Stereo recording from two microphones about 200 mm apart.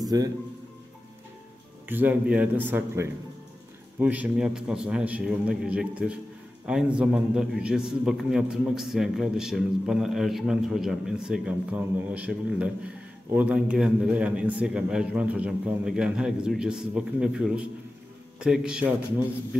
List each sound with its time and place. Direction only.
0.0 s speech: 20° right (ahead or behind)
1.9 s a man's voice: 10° right (ahead or behind)